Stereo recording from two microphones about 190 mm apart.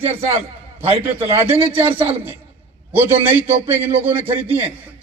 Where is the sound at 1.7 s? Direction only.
10° right (ahead or behind).